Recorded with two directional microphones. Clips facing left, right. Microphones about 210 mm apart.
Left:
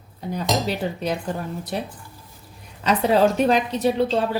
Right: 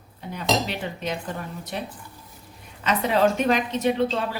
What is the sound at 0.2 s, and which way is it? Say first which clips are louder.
Speech: left 1 dB; 40° left (ahead or behind).